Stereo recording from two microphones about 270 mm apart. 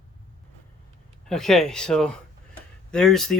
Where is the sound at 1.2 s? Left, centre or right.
Centre.